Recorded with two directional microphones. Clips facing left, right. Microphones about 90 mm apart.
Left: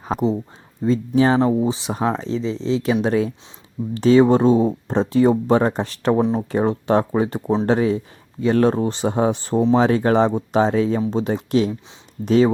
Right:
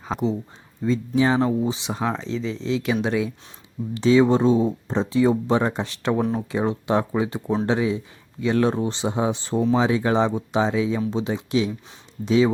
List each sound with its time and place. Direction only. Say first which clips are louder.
0.1 s speech: left 4 dB; 40° left (ahead or behind)
2.0 s speech: left 5 dB; 20° left (ahead or behind)
2.2 s speech: left 4 dB; 35° left (ahead or behind)
6.1 s speech: left 4 dB; 25° left (ahead or behind)
6.5 s speech: left 4 dB; 45° left (ahead or behind)